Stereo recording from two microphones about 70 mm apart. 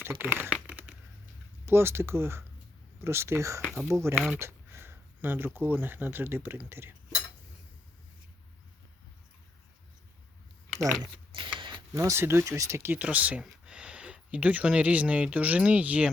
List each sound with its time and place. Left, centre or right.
0.0 s speech: right
0.5 s crumpling: centre
1.6 s speech: right
4.4 s a sound: right
5.5 s speech: right
11.9 s speech: right
12.2 s speech: right
12.9 s speech: right